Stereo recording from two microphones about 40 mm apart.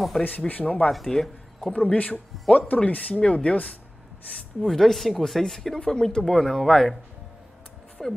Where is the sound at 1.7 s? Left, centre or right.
Left.